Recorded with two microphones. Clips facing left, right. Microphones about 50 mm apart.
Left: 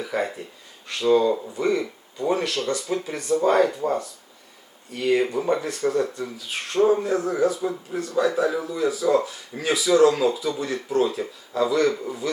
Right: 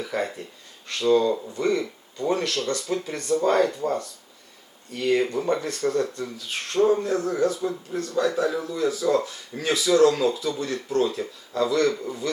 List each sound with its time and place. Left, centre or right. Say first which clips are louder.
0.0 s speech: left 1 dB; centre